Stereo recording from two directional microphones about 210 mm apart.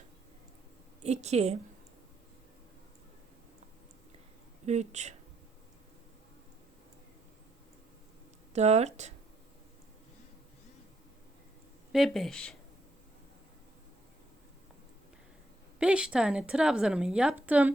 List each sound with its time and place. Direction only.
1.0 s speech: 30° right (ahead or behind)
4.6 s speech: 30° right (ahead or behind)
8.5 s speech: 30° right (ahead or behind)
11.9 s a woman's voice: centre (ahead or behind)
15.8 s a woman's voice: 5° right (ahead or behind)